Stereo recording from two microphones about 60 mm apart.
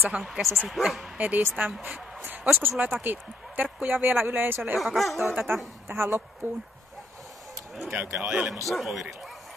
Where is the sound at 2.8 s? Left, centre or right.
Right.